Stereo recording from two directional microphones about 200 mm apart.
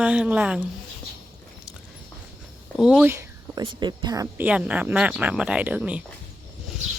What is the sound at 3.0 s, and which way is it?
Speech, 15° right (ahead or behind).